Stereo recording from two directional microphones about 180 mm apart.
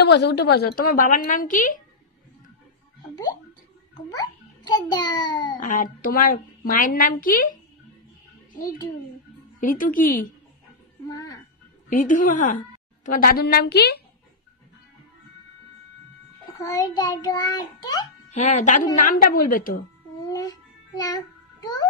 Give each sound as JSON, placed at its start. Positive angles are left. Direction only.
{"t": 0.0, "sound": "a woman's voice", "side_deg": 70}
{"t": 3.9, "sound": "a child's voice", "side_deg": 20}
{"t": 5.6, "sound": "a woman's voice", "side_deg": 45}
{"t": 9.6, "sound": "a woman's voice", "side_deg": 50}
{"t": 11.1, "sound": "music", "side_deg": 20}
{"t": 11.9, "sound": "a woman's voice", "side_deg": 50}
{"t": 16.5, "sound": "a child's voice", "side_deg": 20}
{"t": 18.3, "sound": "a woman's voice", "side_deg": 40}
{"t": 20.2, "sound": "babbling", "side_deg": 20}